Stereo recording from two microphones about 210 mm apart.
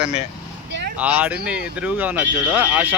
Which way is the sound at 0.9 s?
5° right (ahead or behind).